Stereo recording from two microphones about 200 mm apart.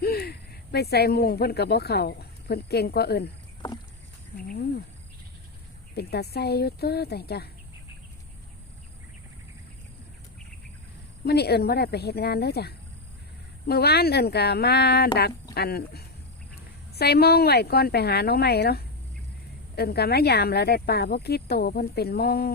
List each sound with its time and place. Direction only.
0.0 s speech: 50° left (ahead or behind)
4.4 s speech: 50° left (ahead or behind)
5.9 s speech: 55° left (ahead or behind)
11.3 s speech: 55° left (ahead or behind)